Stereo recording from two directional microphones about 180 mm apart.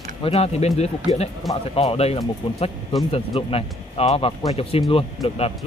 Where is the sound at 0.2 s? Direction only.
35° left (ahead or behind).